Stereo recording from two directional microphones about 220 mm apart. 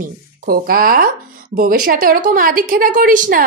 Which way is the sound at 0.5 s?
40° right (ahead or behind).